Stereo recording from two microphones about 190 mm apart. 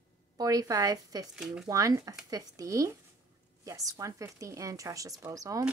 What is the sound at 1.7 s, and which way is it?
Speech, 20° right (ahead or behind).